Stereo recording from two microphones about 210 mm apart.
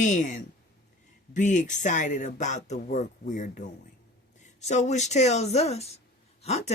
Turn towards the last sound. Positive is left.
turn(degrees=30)  # may be behind; listen again after turning